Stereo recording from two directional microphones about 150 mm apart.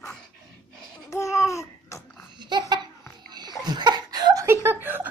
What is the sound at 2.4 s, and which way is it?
Laughter, 30° right (ahead or behind).